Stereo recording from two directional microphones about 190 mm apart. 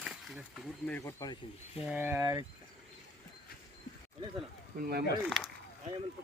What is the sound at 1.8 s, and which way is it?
Speech, 10° right (ahead or behind).